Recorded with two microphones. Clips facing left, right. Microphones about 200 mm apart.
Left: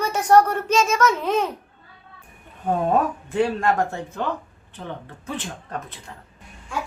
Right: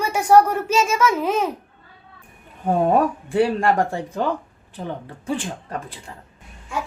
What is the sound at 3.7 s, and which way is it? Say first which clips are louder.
Speech: right 2 dB; 30° right (ahead or behind).